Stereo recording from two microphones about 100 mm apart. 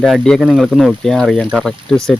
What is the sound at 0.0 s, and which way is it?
Speech, 5° left (ahead or behind).